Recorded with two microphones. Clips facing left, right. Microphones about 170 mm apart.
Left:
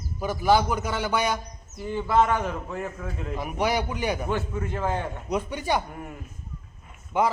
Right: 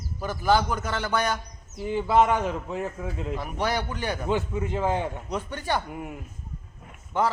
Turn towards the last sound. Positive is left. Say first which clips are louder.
# left 1 dB
turn(degrees=10)  # may be behind; listen again after turning